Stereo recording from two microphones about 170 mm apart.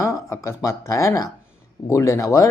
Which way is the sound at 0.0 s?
15° left (ahead or behind).